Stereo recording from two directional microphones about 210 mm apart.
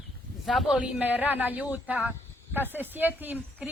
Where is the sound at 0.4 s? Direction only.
Centre (ahead or behind).